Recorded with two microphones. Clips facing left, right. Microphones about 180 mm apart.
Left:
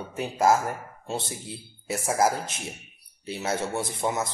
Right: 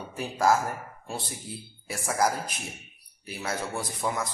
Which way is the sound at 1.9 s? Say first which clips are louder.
Left 3 dB; 25° left (ahead or behind).